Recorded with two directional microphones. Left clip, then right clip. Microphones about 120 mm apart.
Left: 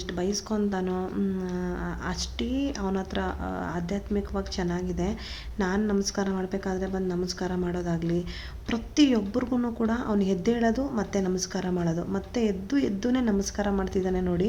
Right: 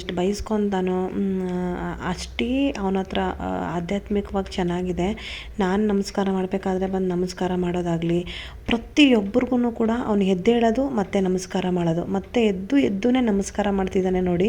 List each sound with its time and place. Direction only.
0.2 s a woman's voice: 35° right (ahead or behind)
1.5 s a woman's voice: 35° right (ahead or behind)
9.5 s a woman's voice: 25° right (ahead or behind)